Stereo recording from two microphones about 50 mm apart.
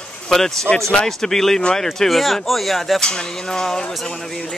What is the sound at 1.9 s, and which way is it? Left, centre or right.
Speech, centre.